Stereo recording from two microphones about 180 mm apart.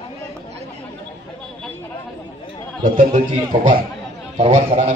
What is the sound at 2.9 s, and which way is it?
A man's voice, 45° right (ahead or behind).